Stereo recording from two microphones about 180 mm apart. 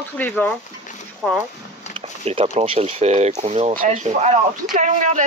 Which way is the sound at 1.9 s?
35° right (ahead or behind).